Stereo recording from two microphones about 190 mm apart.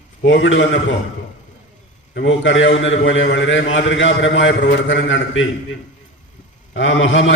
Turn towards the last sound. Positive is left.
turn(degrees=80)